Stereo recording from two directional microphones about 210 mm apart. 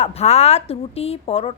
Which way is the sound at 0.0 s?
30° left (ahead or behind).